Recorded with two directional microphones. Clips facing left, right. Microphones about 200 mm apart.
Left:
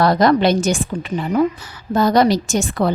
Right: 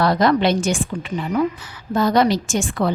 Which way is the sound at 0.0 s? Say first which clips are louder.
Left 3 dB; 40° left (ahead or behind).